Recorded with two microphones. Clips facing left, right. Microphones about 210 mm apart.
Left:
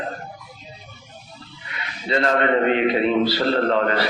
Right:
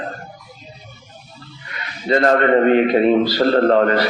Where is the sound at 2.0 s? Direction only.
45° right (ahead or behind).